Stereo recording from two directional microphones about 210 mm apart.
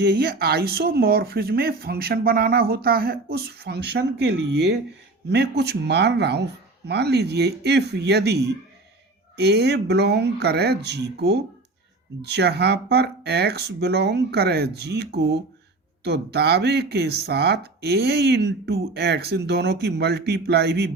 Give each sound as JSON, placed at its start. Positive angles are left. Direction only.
{"t": 0.0, "sound": "speech", "side_deg": -50}